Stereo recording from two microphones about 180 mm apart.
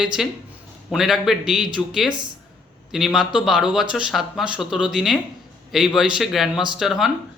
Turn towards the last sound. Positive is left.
turn(degrees=0)  # may be behind; listen again after turning